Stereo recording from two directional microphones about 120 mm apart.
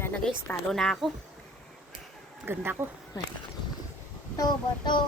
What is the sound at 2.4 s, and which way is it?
Speech, 20° right (ahead or behind).